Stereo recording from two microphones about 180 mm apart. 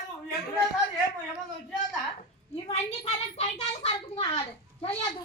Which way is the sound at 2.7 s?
35° left (ahead or behind).